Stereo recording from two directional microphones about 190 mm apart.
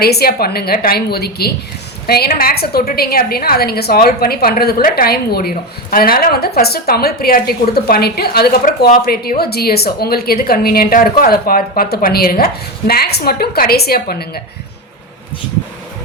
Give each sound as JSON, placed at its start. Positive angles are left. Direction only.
{"t": 0.0, "sound": "a woman's voice", "side_deg": 55}